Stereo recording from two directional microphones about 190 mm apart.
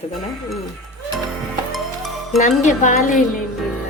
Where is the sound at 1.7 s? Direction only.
Centre (ahead or behind).